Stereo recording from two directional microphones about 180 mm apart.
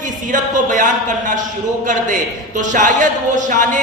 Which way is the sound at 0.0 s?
45° right (ahead or behind).